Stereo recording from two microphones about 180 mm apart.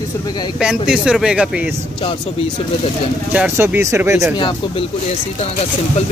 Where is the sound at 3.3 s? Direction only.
10° right (ahead or behind).